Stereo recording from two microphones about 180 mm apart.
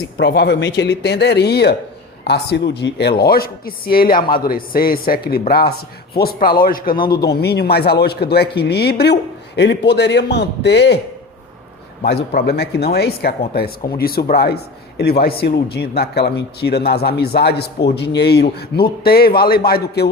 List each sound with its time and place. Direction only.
0.2 s speech: 75° left (ahead or behind); by 4.2 s 55° left (ahead or behind)
4.2 s a man's voice: 25° left (ahead or behind)
4.4 s a man's voice: 55° left (ahead or behind)
7.1 s speech: 65° left (ahead or behind)
12.0 s speech: 65° left (ahead or behind)